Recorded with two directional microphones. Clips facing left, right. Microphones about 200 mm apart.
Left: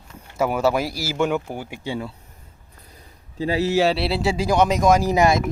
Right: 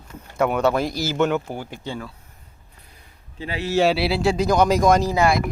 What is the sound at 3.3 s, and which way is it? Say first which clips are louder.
Speech: left 7 dB; 35° left (ahead or behind).